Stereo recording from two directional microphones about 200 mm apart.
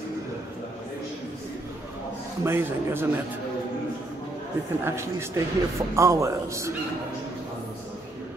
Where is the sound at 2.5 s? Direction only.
10° right (ahead or behind).